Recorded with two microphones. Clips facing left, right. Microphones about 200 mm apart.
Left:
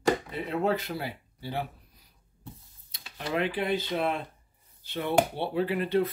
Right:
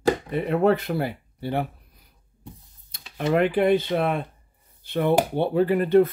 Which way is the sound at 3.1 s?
50° right (ahead or behind).